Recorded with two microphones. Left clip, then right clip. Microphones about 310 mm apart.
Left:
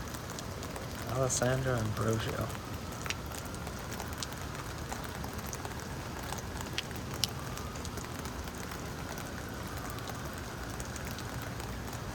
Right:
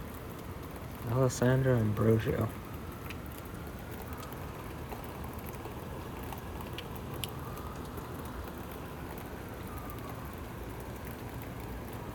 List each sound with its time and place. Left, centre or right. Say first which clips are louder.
1.2 s speech: right 2 dB; centre